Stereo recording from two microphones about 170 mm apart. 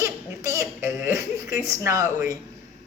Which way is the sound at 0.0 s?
20° right (ahead or behind).